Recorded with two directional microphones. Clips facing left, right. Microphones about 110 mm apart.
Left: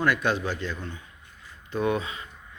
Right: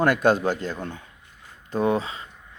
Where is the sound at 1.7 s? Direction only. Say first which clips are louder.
Right 3 dB; 35° right (ahead or behind).